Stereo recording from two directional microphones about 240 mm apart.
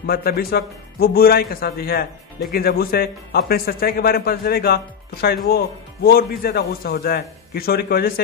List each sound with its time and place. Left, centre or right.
0.0 s a man's voice: left